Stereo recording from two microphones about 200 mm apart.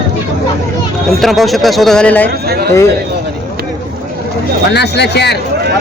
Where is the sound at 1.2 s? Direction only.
Centre (ahead or behind).